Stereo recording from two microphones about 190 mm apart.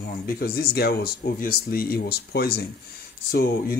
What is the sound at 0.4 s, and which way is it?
Speech, 55° left (ahead or behind).